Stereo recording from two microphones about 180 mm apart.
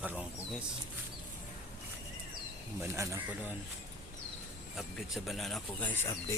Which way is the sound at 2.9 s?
15° right (ahead or behind).